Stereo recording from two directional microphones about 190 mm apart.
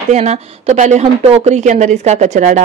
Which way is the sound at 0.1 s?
35° right (ahead or behind).